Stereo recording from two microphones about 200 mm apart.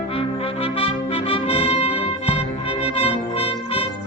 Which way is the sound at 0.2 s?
30° left (ahead or behind).